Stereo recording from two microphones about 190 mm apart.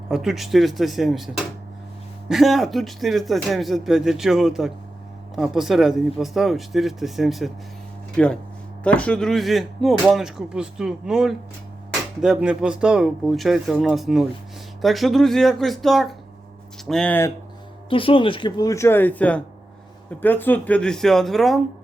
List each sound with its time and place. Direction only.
0.1 s speech: centre (ahead or behind)
2.3 s speech: centre (ahead or behind)
17.8 s speech: 25° left (ahead or behind); by 21.6 s centre (ahead or behind)